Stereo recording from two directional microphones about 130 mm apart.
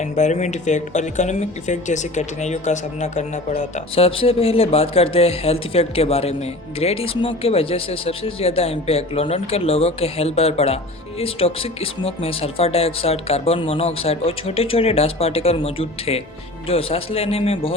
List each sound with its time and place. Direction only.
0.0 s speech: 65° left (ahead or behind)
3.9 s speech: 45° left (ahead or behind)